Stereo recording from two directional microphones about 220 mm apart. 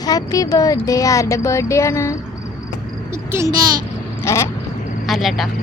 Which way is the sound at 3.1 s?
10° right (ahead or behind).